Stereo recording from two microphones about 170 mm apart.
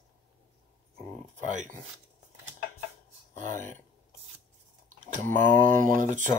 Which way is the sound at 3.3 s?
50° right (ahead or behind).